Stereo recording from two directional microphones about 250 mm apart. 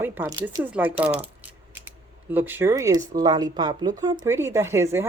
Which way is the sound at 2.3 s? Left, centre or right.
Centre.